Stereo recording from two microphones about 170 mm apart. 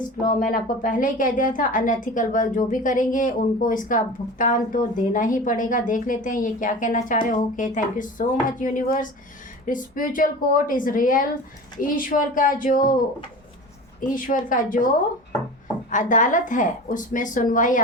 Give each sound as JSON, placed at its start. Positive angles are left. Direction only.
{"t": 0.5, "sound": "a woman's voice", "side_deg": 55}
{"t": 14.1, "sound": "a woman's voice", "side_deg": 55}
{"t": 15.9, "sound": "a woman's voice", "side_deg": 50}